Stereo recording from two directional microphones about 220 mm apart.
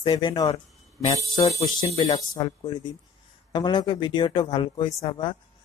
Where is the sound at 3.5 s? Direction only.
20° left (ahead or behind).